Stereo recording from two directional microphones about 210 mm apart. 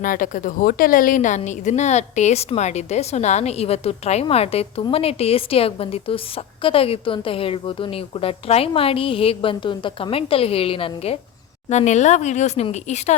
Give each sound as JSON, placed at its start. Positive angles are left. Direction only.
{"t": 0.0, "sound": "a woman's voice", "side_deg": 40}